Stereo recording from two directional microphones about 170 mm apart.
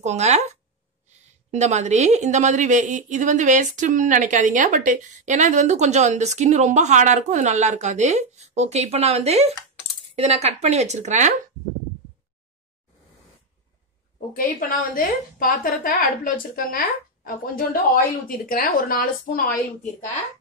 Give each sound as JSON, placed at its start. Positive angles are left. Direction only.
{"t": 0.0, "sound": "speech", "side_deg": -40}
{"t": 14.3, "sound": "a woman's voice", "side_deg": 55}